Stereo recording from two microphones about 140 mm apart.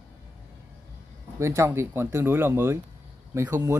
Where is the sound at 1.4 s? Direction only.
20° right (ahead or behind).